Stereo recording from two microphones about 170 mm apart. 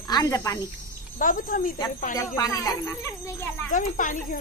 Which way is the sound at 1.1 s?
50° left (ahead or behind).